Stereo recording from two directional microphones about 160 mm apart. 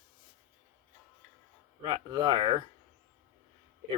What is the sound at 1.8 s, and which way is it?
Speech, 30° right (ahead or behind).